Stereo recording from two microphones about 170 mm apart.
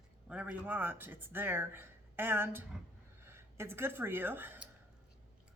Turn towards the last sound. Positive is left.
turn(degrees=-10)  # may be behind; listen again after turning